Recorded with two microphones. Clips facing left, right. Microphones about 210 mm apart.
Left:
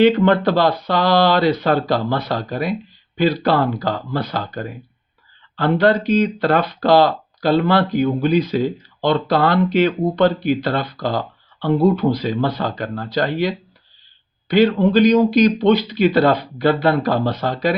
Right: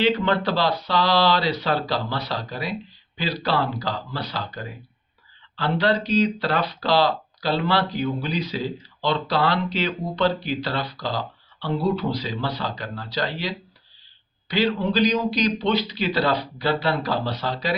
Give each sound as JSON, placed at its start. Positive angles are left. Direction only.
{"t": 0.0, "sound": "speech", "side_deg": 50}